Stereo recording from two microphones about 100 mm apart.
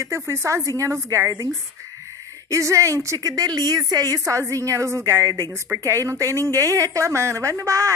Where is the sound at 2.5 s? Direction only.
30° right (ahead or behind).